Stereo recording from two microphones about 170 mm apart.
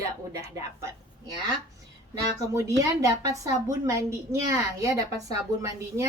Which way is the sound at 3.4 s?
20° right (ahead or behind).